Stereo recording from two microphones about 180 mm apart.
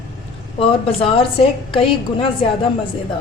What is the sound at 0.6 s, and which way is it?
Speech, 30° left (ahead or behind).